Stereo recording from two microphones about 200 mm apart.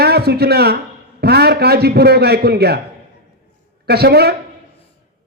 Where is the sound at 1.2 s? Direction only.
55° right (ahead or behind).